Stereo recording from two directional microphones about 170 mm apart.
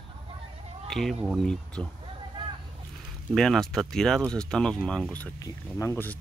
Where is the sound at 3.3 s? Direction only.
Centre (ahead or behind).